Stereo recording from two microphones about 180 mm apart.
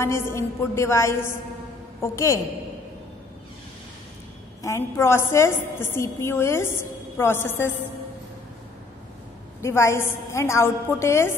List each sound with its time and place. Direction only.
0.0 s a woman's voice: 15° left (ahead or behind)
4.6 s a woman's voice: 15° left (ahead or behind)
9.6 s a woman's voice: 15° left (ahead or behind)